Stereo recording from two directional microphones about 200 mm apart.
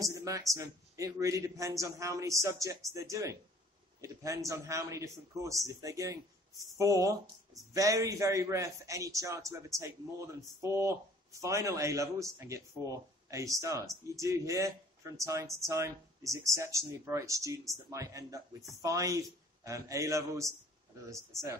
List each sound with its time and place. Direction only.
0.0 s speech: 15° right (ahead or behind)